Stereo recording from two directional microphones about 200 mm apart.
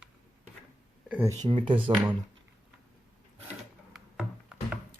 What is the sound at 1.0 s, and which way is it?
Speech, 5° right (ahead or behind).